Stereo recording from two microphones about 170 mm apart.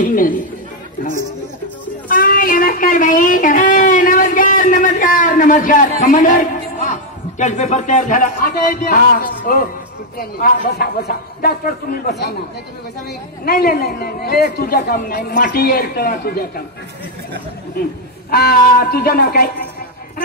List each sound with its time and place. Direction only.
0.0 s speech: 55° left (ahead or behind)
2.0 s a sound: 55° left (ahead or behind)
10.1 s a man's voice: 60° left (ahead or behind)
13.5 s a man's voice: 60° left (ahead or behind)
18.3 s a man's voice: 65° left (ahead or behind)